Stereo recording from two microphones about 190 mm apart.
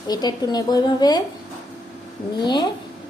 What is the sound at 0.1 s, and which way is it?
A woman's voice, 20° left (ahead or behind).